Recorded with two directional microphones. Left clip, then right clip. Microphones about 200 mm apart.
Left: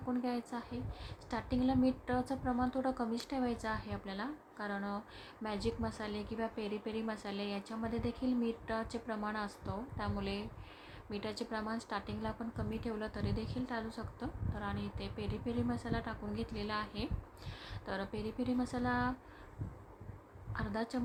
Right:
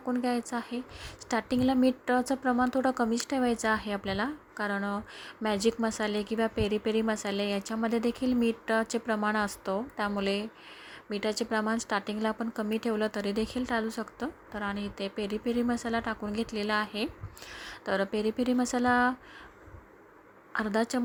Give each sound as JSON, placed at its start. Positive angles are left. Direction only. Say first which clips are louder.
{"t": 0.1, "sound": "a woman's voice", "louder": "right 8 dB", "side_deg": -30}
{"t": 20.5, "sound": "a woman's voice", "louder": "right 10 dB", "side_deg": -35}